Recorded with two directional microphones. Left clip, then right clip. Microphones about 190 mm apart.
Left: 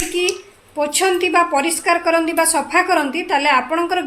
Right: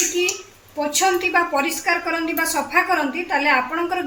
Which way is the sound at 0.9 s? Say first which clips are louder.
Left 2 dB; 50° left (ahead or behind).